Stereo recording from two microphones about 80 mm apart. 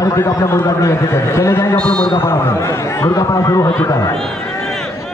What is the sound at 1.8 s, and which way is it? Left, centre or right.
Speech, centre.